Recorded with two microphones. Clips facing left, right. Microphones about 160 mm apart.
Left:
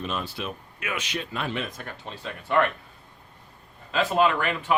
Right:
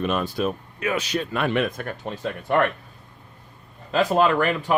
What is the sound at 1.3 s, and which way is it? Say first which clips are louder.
Speech: right 9 dB; 60° right (ahead or behind).